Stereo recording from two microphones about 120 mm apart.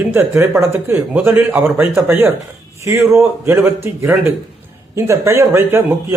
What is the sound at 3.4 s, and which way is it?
A man's voice, 20° right (ahead or behind).